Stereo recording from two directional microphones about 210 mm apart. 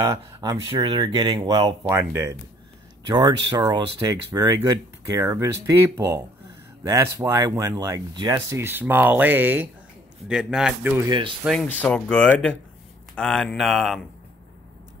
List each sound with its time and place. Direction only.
0.0 s speech: 15° right (ahead or behind)
11.1 s speech: 20° right (ahead or behind)
11.4 s speech: 5° left (ahead or behind)